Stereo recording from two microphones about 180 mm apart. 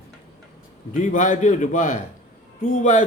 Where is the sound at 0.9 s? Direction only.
45° left (ahead or behind).